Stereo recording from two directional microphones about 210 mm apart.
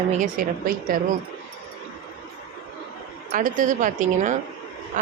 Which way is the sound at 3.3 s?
40° right (ahead or behind).